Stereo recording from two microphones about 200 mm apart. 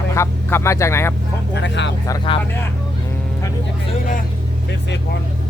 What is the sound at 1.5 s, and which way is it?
Speech, 60° left (ahead or behind).